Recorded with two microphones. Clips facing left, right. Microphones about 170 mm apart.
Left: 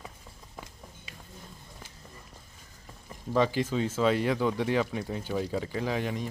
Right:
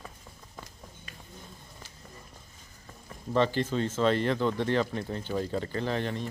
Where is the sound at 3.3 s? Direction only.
10° left (ahead or behind).